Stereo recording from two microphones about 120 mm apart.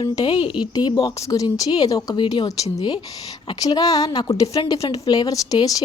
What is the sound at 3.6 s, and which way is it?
A woman's voice, 30° left (ahead or behind).